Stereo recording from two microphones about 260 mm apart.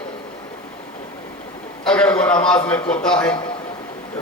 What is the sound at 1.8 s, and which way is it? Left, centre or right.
A man's voice, centre.